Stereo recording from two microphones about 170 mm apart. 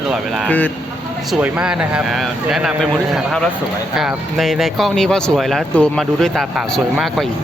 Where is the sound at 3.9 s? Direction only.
Centre (ahead or behind).